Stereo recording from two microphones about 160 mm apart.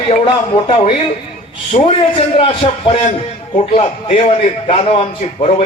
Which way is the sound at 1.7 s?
35° left (ahead or behind).